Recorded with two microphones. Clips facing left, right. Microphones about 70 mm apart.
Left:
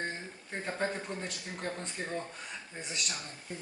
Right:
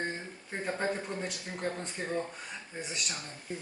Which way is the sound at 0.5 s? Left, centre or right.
Centre.